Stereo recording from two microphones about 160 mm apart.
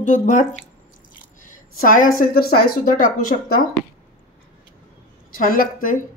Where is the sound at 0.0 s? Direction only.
55° left (ahead or behind).